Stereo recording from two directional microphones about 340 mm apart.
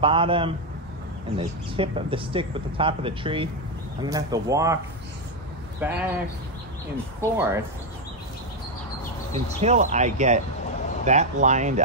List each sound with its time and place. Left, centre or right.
0.0 s speech: centre
5.8 s speech: centre
9.6 s speech: right